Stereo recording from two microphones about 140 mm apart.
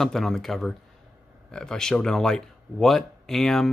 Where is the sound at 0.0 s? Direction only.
Centre (ahead or behind).